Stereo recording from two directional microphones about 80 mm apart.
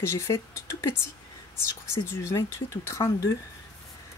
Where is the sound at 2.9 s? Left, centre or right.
Left.